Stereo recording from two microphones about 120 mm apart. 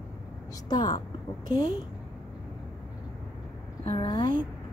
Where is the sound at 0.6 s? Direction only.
35° left (ahead or behind).